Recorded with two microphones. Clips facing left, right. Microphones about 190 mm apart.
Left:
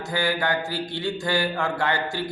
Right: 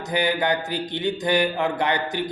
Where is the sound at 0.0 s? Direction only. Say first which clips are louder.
Right 2 dB; 20° right (ahead or behind).